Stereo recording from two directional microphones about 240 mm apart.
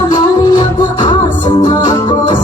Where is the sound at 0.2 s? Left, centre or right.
Centre.